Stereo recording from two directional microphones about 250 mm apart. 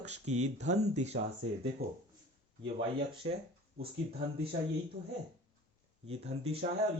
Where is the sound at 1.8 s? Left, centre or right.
Right.